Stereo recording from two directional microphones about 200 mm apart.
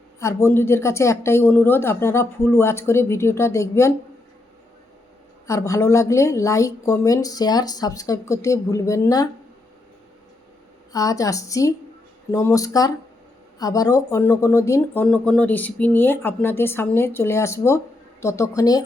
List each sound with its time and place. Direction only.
0.2 s speech: 15° left (ahead or behind)
5.5 s speech: 15° left (ahead or behind)
10.9 s speech: 15° left (ahead or behind)